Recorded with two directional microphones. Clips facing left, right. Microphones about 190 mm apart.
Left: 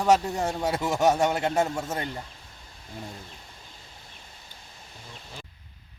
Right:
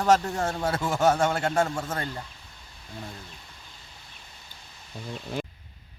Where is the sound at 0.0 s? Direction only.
15° left (ahead or behind).